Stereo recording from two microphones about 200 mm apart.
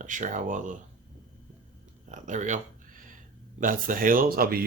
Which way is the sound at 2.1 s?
35° right (ahead or behind).